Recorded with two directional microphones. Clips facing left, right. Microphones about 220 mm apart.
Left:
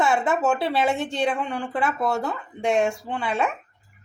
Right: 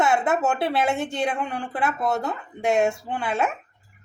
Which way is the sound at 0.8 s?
Centre (ahead or behind).